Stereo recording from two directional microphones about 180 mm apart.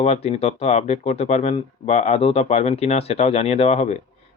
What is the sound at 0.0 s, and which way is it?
Speech, 35° left (ahead or behind).